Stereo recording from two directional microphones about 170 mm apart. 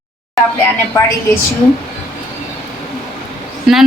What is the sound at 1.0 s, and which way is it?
Speech, 20° left (ahead or behind).